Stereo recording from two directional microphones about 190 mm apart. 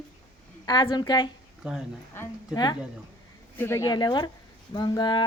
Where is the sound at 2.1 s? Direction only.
15° left (ahead or behind).